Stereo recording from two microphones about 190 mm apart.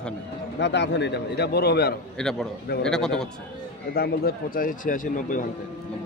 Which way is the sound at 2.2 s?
5° left (ahead or behind).